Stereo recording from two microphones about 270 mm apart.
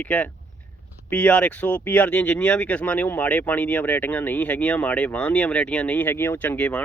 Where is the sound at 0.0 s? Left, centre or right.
Centre.